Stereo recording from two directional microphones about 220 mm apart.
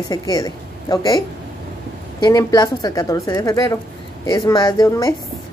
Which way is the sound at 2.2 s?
15° left (ahead or behind).